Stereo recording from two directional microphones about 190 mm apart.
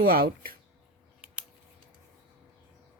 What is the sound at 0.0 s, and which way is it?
Speech, 50° right (ahead or behind).